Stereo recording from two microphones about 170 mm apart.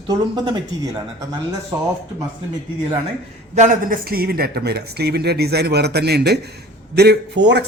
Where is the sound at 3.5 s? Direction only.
50° right (ahead or behind); by 7.6 s 90° right.